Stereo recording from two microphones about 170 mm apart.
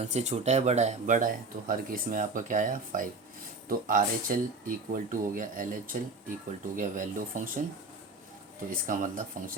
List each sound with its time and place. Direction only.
0.0 s speech: 40° right (ahead or behind)
8.7 s speech: 50° right (ahead or behind)